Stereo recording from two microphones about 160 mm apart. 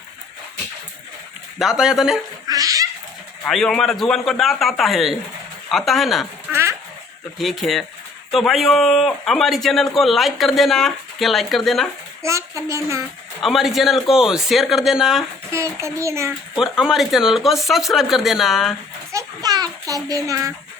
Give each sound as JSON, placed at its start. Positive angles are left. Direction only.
{"t": 1.5, "sound": "a man's voice", "side_deg": -5}
{"t": 2.5, "sound": "a sound", "side_deg": -20}
{"t": 3.4, "sound": "a man's voice", "side_deg": 5}
{"t": 6.5, "sound": "a sound", "side_deg": -15}
{"t": 7.3, "sound": "a man's voice", "side_deg": 0}
{"t": 12.2, "sound": "a child's voice", "side_deg": -20}
{"t": 13.4, "sound": "a man's voice", "side_deg": 0}
{"t": 15.5, "sound": "a child's voice", "side_deg": -20}
{"t": 16.6, "sound": "a man's voice", "side_deg": -5}
{"t": 19.1, "sound": "a child's voice", "side_deg": -25}